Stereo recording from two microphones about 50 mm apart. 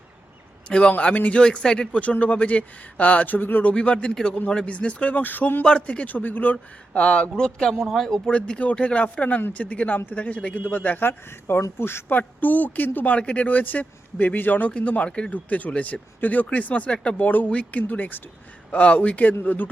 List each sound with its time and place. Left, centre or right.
0.7 s speech: left
1.4 s speech: centre
1.9 s speech: left
3.6 s speech: left
5.6 s speech: left
7.0 s speech: left; by 8.2 s centre
8.4 s speech: left
11.3 s speech: left
12.1 s speech: left
13.1 s speech: left
15.3 s speech: left
17.2 s speech: left